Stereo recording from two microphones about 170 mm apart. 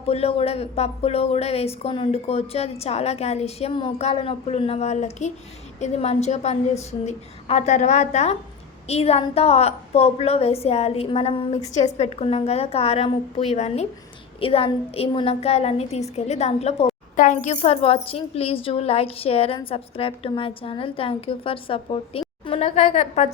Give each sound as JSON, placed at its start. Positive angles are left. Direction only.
{"t": 0.1, "sound": "speech", "side_deg": 35}